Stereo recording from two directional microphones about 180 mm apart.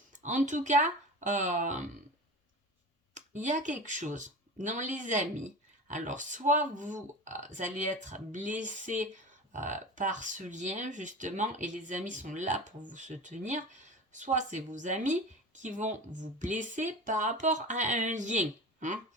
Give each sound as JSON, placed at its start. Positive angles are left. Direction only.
{"t": 0.1, "sound": "speech", "side_deg": -45}
{"t": 3.2, "sound": "speech", "side_deg": -45}